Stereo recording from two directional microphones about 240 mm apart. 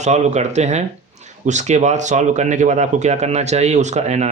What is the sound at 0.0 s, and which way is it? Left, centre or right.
Speech, right.